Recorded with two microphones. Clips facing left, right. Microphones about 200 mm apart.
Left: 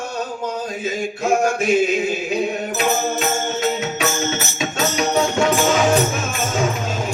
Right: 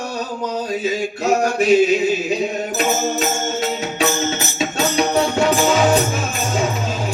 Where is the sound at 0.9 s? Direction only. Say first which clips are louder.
Even; 50° left (ahead or behind).